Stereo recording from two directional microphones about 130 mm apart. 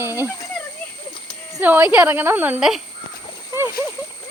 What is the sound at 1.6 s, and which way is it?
Speech, 15° right (ahead or behind).